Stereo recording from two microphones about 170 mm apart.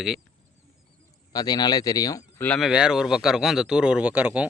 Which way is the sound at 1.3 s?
25° left (ahead or behind).